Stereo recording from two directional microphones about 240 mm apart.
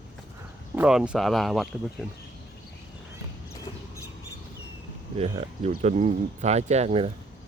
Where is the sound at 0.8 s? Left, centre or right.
Centre.